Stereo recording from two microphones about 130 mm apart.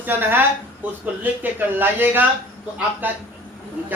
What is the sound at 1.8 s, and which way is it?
A man's voice, 15° right (ahead or behind).